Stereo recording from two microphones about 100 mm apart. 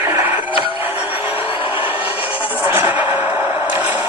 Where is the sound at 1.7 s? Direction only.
20° right (ahead or behind).